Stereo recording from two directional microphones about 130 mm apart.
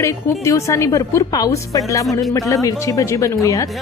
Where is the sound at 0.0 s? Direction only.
20° left (ahead or behind).